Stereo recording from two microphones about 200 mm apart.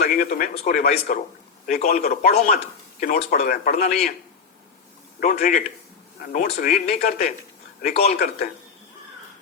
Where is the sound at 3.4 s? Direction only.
45° left (ahead or behind).